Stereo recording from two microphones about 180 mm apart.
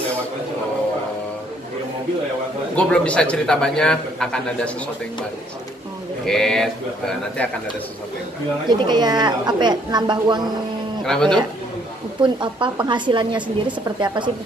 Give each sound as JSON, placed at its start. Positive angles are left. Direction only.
{"t": 2.7, "sound": "a man's voice", "side_deg": 5}
{"t": 6.2, "sound": "a man's voice", "side_deg": 0}
{"t": 8.6, "sound": "a woman's voice", "side_deg": -25}
{"t": 11.1, "sound": "a man's voice", "side_deg": 5}
{"t": 12.2, "sound": "a woman's voice", "side_deg": -25}